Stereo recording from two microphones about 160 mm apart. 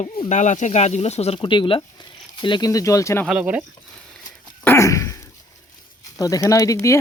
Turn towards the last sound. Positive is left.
turn(degrees=20)  # may be behind; listen again after turning